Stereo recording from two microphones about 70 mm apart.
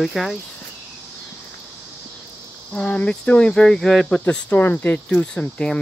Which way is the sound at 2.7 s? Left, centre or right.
Centre.